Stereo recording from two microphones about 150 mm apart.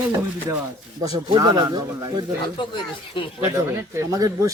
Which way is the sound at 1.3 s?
30° right (ahead or behind).